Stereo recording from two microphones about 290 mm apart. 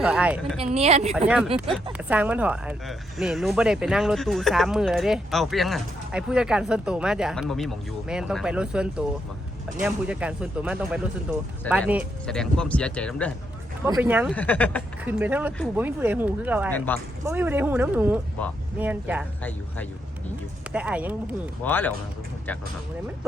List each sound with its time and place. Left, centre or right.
0.0 s speech: centre
0.6 s a woman's voice: right
1.7 s speech: centre
13.8 s speech: centre
14.3 s speech: centre
15.0 s speech: centre
16.7 s speech: centre
17.2 s speech: centre
19.4 s speech: centre
21.6 s speech: centre